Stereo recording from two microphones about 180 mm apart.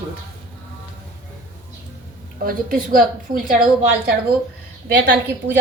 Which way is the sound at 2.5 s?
50° right (ahead or behind).